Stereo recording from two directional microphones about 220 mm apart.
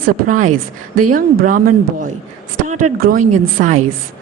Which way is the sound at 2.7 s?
35° right (ahead or behind).